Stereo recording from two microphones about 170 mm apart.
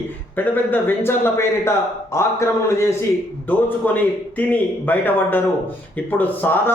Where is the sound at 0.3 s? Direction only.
10° left (ahead or behind).